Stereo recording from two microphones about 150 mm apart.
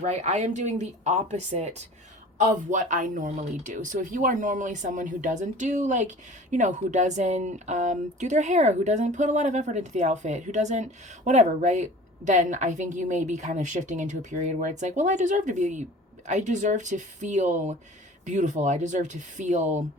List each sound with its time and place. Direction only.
0.0 s speech: 50° right (ahead or behind)